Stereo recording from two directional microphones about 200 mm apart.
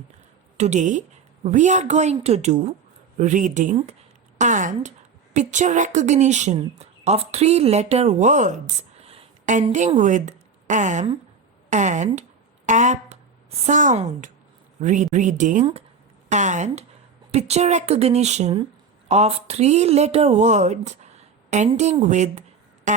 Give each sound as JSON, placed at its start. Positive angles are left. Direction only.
{"t": 0.5, "sound": "a woman's voice", "side_deg": -35}